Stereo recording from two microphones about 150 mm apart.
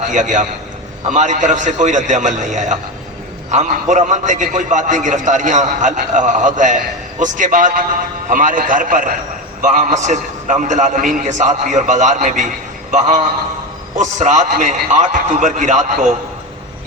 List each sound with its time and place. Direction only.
0.0 s a man's voice: 55° right (ahead or behind)